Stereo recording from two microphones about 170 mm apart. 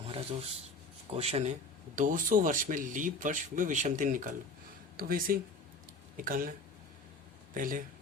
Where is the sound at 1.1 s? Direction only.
40° right (ahead or behind).